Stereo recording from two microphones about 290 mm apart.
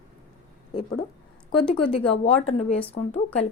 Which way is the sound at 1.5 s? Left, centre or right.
Centre.